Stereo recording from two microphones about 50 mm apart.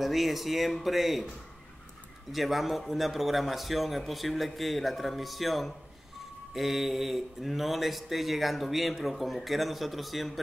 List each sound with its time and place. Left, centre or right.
0.0 s speech: centre
2.3 s speech: centre